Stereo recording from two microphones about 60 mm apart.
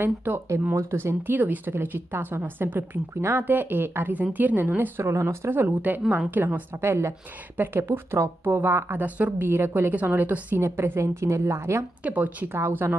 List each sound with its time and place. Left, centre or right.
0.0 s speech: right
0.7 s speech: right
5.0 s a woman's voice: right
5.7 s a woman's voice: right
6.4 s speech: right
10.6 s a woman's voice: right
12.0 s a woman's voice: right
12.5 s a woman's voice: right